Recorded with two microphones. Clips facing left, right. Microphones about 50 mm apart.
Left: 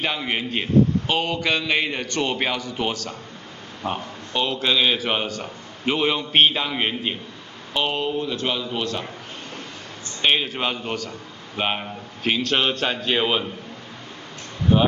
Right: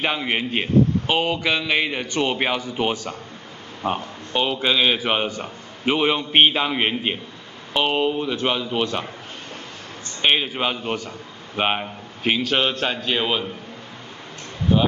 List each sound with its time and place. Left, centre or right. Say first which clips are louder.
0.0 s a man's voice: right 2 dB; centre
10.2 s a man's voice: right 1 dB; centre
14.7 s speech: left 1 dB; centre